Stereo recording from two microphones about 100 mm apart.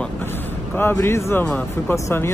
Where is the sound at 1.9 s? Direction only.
25° left (ahead or behind).